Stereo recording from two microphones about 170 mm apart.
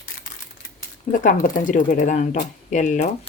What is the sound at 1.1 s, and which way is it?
Speech, 50° left (ahead or behind).